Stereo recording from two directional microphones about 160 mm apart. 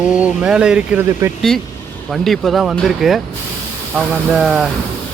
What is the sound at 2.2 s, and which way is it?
Speech, centre (ahead or behind).